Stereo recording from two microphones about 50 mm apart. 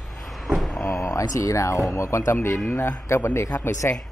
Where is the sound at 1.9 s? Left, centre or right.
Left.